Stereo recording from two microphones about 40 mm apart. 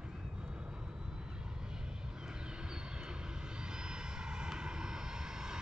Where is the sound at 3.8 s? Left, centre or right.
Centre.